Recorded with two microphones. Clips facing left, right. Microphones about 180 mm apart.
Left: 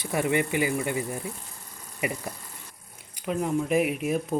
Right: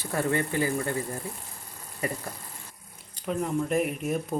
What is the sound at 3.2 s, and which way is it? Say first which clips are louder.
Speech: left 2 dB; 5° left (ahead or behind).